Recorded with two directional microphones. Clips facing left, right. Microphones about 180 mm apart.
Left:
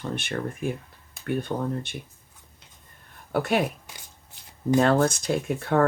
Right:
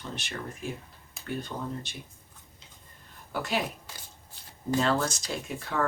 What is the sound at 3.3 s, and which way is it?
Speech, 60° left (ahead or behind).